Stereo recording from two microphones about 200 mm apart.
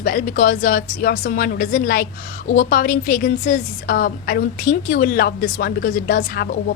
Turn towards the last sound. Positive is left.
turn(degrees=50)  # may be behind; listen again after turning